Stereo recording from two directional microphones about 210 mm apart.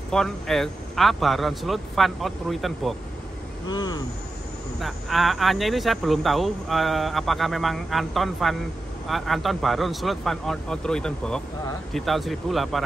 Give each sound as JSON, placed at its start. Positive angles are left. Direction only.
{"t": 0.1, "sound": "speech", "side_deg": 0}
{"t": 3.6, "sound": "speech", "side_deg": 20}
{"t": 4.7, "sound": "speech", "side_deg": 0}